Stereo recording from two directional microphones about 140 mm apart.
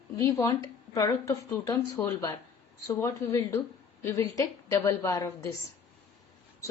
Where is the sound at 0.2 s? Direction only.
25° left (ahead or behind).